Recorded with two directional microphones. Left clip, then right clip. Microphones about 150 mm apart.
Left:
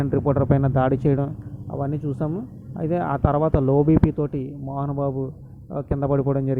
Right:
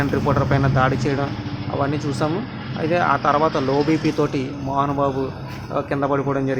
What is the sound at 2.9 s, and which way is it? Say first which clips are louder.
Speech: right 5 dB; 40° left (ahead or behind).